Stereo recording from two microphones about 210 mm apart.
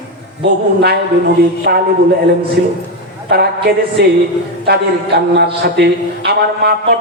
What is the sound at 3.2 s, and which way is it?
Speech, 50° right (ahead or behind).